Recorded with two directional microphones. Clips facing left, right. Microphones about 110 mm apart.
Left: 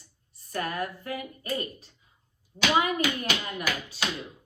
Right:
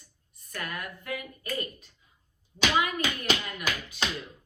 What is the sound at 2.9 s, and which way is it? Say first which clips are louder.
A woman's voice: left 1 dB; 35° left (ahead or behind).